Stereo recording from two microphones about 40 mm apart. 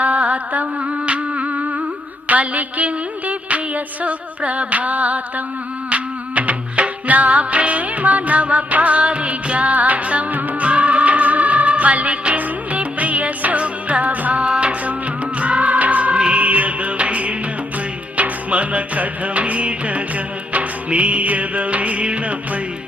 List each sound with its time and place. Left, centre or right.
0.0 s music: right
4.0 s a sound: right
5.9 s music: right
14.4 s music: right